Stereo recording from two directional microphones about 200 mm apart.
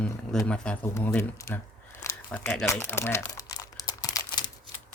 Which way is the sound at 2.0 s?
15° left (ahead or behind).